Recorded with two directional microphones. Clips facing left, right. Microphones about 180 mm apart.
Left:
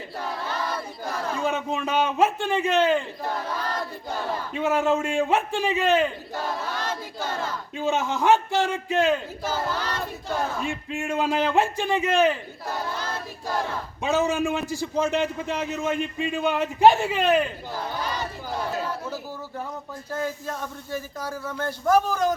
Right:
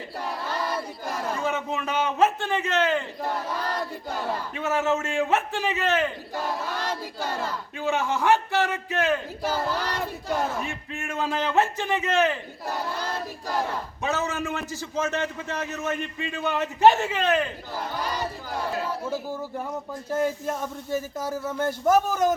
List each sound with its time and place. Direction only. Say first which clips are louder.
1.4 s a man's voice: left 2 dB; 15° left (ahead or behind)
4.5 s a man's voice: left 3 dB; 15° left (ahead or behind)
6.8 s battle cry: even; 10° right (ahead or behind)
7.8 s a man's voice: left 1 dB; 15° left (ahead or behind)
9.8 s battle cry: right 1 dB; 15° right (ahead or behind)
10.9 s a man's voice: left 4 dB; 15° left (ahead or behind)
14.0 s a man's voice: left 6 dB; 15° left (ahead or behind)
18.8 s chatter: even; 5° right (ahead or behind)
20.1 s speech: right 4 dB; 20° right (ahead or behind)
21.4 s speech: right 2 dB; 20° right (ahead or behind)